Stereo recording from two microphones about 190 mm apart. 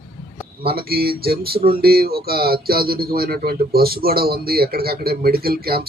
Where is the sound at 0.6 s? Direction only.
55° right (ahead or behind).